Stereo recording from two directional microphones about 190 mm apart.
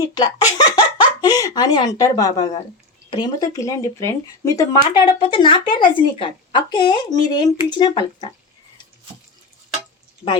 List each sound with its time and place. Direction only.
0.1 s speech: 20° left (ahead or behind)